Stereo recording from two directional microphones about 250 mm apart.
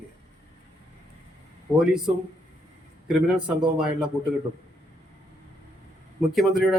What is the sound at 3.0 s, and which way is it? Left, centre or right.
Speech, centre.